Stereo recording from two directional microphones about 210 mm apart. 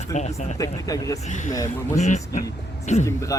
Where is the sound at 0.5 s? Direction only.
15° left (ahead or behind).